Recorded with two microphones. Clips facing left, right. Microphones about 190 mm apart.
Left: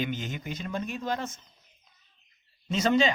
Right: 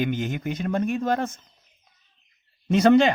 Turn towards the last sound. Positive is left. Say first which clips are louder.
# right 8 dB
turn(degrees=-60)  # may be behind; listen again after turning